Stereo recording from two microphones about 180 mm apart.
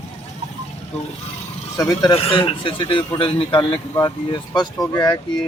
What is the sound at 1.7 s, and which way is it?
A man's voice, 20° left (ahead or behind).